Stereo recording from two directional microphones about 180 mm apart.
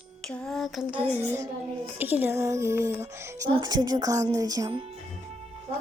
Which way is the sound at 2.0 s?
10° right (ahead or behind).